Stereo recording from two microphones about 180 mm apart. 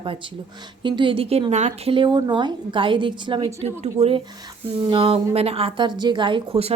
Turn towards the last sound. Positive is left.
turn(degrees=-30)  # may be behind; listen again after turning